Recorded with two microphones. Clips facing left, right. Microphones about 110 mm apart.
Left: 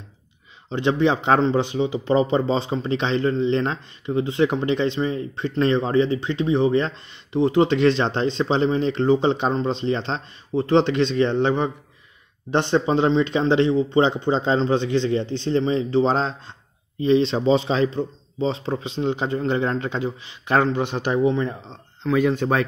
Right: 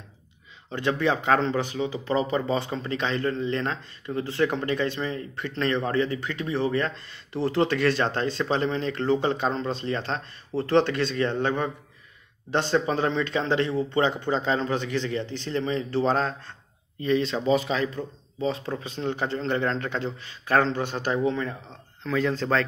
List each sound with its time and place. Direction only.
0.7 s speech: 25° left (ahead or behind)